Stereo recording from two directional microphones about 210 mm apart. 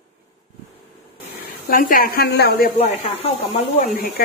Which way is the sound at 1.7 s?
45° left (ahead or behind).